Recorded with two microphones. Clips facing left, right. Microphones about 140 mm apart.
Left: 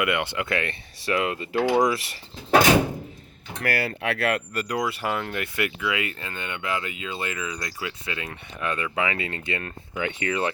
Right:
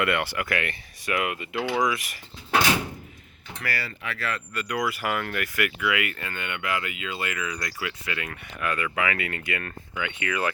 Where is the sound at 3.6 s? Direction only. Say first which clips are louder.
Left 6 dB; 55° left (ahead or behind).